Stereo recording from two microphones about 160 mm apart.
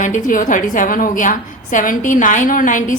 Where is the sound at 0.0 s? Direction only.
55° left (ahead or behind).